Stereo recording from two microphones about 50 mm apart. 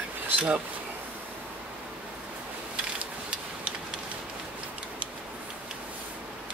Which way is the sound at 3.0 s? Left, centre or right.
Right.